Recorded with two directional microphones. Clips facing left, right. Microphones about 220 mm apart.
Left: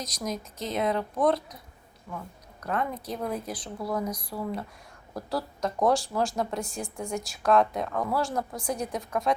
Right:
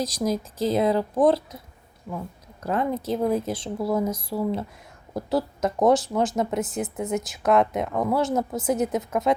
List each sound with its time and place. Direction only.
0.0 s speech: 30° right (ahead or behind)
2.6 s speech: 30° right (ahead or behind)